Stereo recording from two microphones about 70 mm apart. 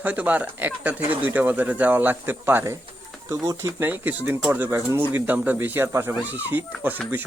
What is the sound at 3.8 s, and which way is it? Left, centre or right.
Speech, right.